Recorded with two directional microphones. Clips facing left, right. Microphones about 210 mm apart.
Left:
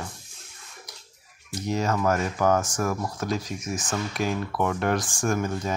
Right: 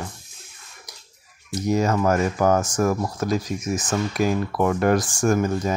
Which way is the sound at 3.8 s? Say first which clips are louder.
Right 5 dB; 40° right (ahead or behind).